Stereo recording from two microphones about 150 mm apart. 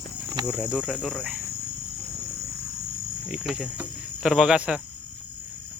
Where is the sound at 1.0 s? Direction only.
5° left (ahead or behind).